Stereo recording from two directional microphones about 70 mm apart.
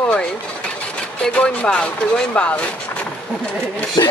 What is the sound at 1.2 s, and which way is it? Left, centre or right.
Speech, centre.